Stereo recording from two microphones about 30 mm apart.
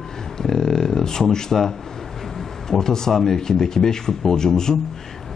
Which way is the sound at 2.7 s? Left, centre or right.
Centre.